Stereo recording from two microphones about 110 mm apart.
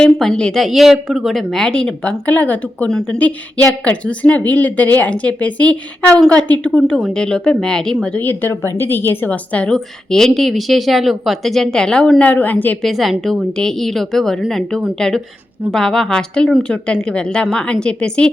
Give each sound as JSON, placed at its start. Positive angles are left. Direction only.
{"t": 0.0, "sound": "a woman's voice", "side_deg": 5}
{"t": 12.8, "sound": "a woman's voice", "side_deg": 0}